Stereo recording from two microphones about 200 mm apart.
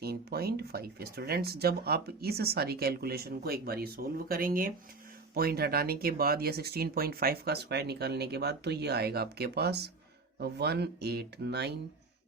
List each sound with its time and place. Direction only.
0.0 s speech: 50° right (ahead or behind)